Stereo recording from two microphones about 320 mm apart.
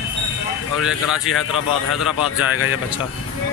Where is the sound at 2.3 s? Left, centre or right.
Left.